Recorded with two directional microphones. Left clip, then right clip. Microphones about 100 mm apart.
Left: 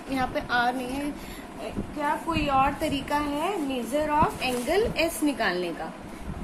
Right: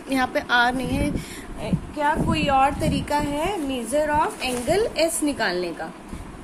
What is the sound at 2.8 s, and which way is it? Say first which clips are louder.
A woman's voice: right 3 dB; 40° right (ahead or behind).